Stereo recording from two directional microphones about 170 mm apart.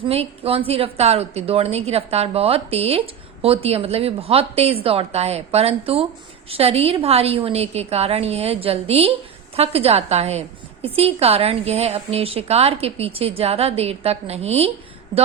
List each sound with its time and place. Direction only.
0.1 s a woman's voice: 35° right (ahead or behind)